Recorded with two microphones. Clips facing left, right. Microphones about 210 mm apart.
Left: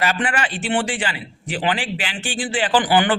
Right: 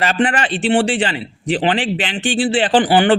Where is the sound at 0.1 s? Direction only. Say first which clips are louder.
Right 6 dB; 35° right (ahead or behind).